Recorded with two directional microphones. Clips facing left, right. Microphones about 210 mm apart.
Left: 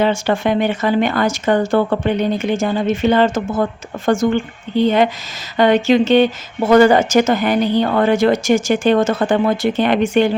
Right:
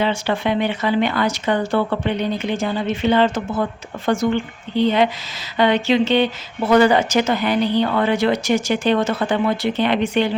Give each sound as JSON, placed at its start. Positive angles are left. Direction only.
{"t": 0.0, "sound": "speech", "side_deg": 45}